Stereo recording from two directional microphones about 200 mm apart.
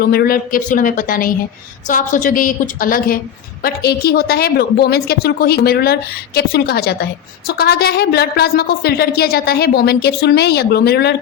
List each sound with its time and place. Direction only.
0.0 s a woman's voice: 50° left (ahead or behind)